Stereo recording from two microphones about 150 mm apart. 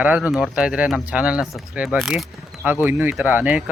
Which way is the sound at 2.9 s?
15° right (ahead or behind).